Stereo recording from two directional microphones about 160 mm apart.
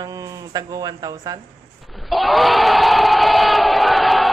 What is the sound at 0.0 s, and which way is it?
Speech, 20° right (ahead or behind).